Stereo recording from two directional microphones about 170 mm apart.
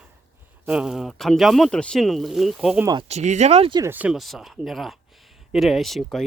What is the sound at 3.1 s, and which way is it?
Speech, 40° right (ahead or behind).